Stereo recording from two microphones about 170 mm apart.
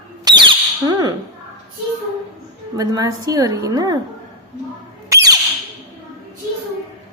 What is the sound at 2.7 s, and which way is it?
A woman's voice, 20° right (ahead or behind).